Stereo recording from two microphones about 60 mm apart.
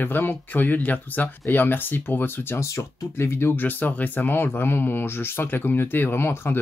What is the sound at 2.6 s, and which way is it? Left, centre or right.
Speech, left.